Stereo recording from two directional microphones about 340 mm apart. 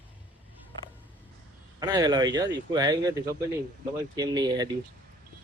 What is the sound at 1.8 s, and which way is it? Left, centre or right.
Speech, centre.